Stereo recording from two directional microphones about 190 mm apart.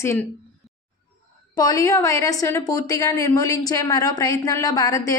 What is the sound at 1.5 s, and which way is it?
A woman's voice, 20° left (ahead or behind).